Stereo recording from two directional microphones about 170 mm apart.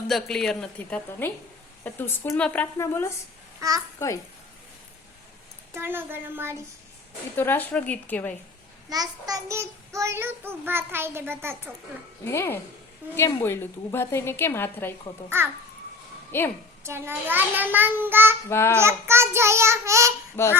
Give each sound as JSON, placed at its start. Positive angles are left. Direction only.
{"t": 0.1, "sound": "a woman's voice", "side_deg": 0}
{"t": 3.6, "sound": "a child's voice", "side_deg": -20}
{"t": 5.7, "sound": "child singing", "side_deg": -15}
{"t": 7.3, "sound": "a woman's voice", "side_deg": 10}
{"t": 8.9, "sound": "child singing", "side_deg": -20}
{"t": 12.2, "sound": "a woman's voice", "side_deg": 15}
{"t": 15.3, "sound": "child singing", "side_deg": -15}
{"t": 16.3, "sound": "a woman's voice", "side_deg": 15}
{"t": 16.8, "sound": "child singing", "side_deg": -15}
{"t": 18.4, "sound": "a woman's voice", "side_deg": 15}
{"t": 18.7, "sound": "child singing", "side_deg": -15}
{"t": 20.4, "sound": "a woman's voice", "side_deg": 15}